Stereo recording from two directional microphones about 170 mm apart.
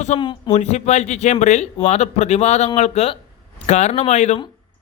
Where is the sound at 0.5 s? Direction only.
40° left (ahead or behind).